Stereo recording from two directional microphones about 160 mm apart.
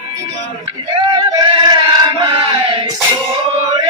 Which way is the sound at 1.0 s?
30° right (ahead or behind).